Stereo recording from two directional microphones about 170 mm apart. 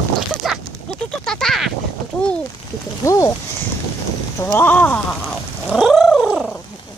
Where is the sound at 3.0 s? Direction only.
20° left (ahead or behind).